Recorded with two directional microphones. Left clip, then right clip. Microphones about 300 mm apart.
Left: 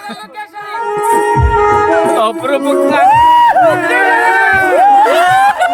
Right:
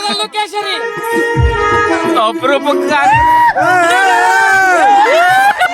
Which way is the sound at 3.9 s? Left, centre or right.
Right.